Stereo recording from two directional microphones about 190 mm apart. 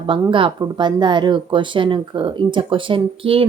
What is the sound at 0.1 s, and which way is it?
A woman's voice, 25° right (ahead or behind).